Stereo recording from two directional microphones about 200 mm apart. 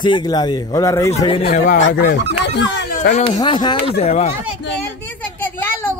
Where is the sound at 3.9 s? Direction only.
35° left (ahead or behind).